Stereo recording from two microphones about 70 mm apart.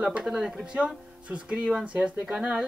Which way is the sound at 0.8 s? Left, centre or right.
Centre.